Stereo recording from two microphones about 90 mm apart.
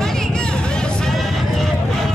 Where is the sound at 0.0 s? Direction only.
5° left (ahead or behind).